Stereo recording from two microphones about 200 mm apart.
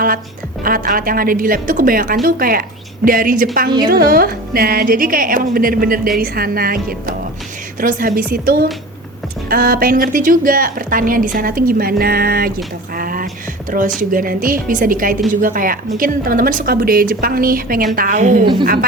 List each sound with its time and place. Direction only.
0.6 s a woman's voice: 45° right (ahead or behind)
13.0 s a sound: 45° right (ahead or behind)
13.7 s a woman's voice: 40° right (ahead or behind)